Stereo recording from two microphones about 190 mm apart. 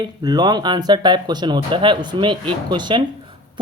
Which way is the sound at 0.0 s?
20° right (ahead or behind).